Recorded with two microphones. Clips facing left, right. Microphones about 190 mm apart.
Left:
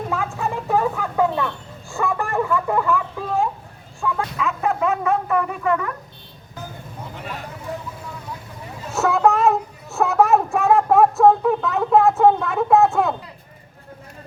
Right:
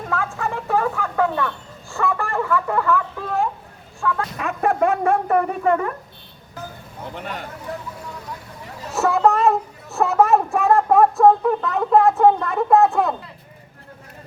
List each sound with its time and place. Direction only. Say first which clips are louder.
0.1 s speech: right 3 dB; 15° left (ahead or behind)
4.4 s speech: right 4 dB; 50° right (ahead or behind); by 5.9 s 35° right (ahead or behind)
8.9 s speech: even; centre (ahead or behind)